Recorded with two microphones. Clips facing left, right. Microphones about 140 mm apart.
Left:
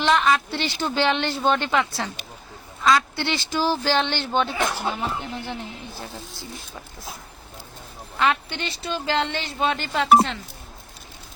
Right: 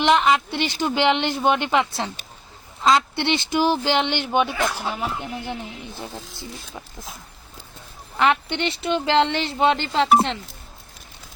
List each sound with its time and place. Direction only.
0.0 s a woman's voice: 20° right (ahead or behind)
4.6 s speech: centre (ahead or behind)
8.2 s a woman's voice: 25° right (ahead or behind)